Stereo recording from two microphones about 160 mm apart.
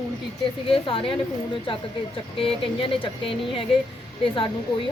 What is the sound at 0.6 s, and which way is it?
Speech, 35° left (ahead or behind).